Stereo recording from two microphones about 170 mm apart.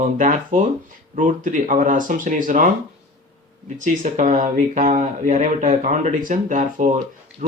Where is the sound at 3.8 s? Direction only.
50° right (ahead or behind).